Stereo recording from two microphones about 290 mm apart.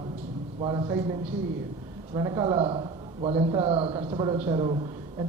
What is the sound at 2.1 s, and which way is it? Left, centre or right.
Speech, centre.